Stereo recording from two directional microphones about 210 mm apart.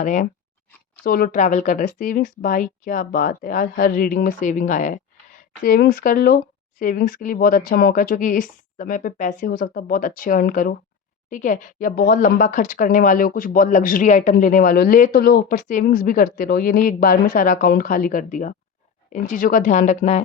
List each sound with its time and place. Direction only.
0.0 s speech: 35° left (ahead or behind)